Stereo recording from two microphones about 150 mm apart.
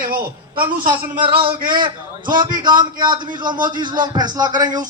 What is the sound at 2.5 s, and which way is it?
A man's voice, 30° right (ahead or behind).